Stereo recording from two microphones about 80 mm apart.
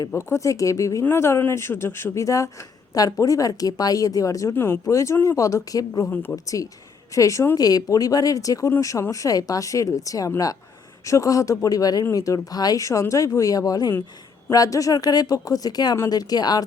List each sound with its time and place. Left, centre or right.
0.1 s speech: left
2.2 s speech: left
4.5 s speech: left